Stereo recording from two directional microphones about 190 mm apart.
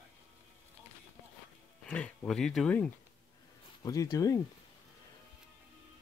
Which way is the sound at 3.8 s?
20° left (ahead or behind).